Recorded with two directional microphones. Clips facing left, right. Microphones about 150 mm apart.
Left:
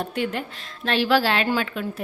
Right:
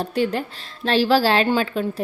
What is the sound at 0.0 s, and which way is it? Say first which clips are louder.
A woman's voice: right 4 dB; 35° right (ahead or behind).